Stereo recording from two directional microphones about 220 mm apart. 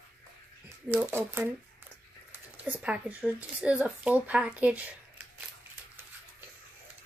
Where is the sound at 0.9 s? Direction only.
10° right (ahead or behind).